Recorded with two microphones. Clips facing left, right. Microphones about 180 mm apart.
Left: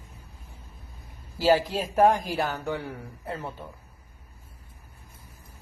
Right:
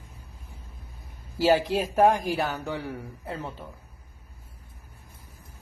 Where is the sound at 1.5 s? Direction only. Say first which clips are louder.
Left 1 dB; 15° right (ahead or behind).